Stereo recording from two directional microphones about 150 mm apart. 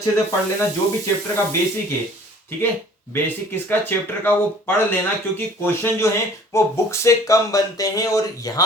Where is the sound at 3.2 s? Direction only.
15° left (ahead or behind).